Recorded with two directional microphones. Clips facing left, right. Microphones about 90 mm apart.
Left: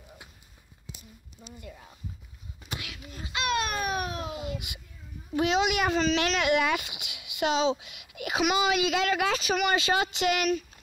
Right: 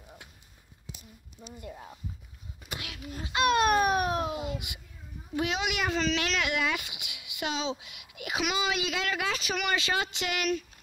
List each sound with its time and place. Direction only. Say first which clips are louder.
1.6 s speech: right 4 dB; 35° right (ahead or behind)
2.8 s speech: right 2 dB; 45° right (ahead or behind)
4.3 s a child's voice: right 1 dB; 25° right (ahead or behind)
5.3 s a child's voice: left 5 dB; 25° left (ahead or behind)
7.1 s a sound: left 1 dB; 30° right (ahead or behind)
7.3 s a child's voice: left 7 dB; 30° left (ahead or behind)